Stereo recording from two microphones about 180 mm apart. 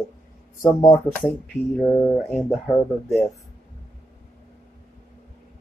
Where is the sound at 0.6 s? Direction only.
20° left (ahead or behind).